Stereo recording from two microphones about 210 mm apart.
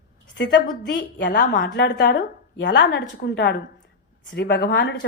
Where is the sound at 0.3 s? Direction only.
50° left (ahead or behind).